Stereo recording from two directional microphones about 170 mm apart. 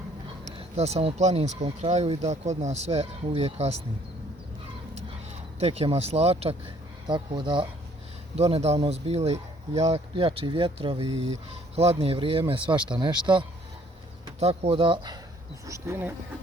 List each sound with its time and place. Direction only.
0.8 s speech: 40° right (ahead or behind)
5.5 s speech: 35° right (ahead or behind)
14.3 s speech: 40° right (ahead or behind)
15.6 s speech: 15° right (ahead or behind)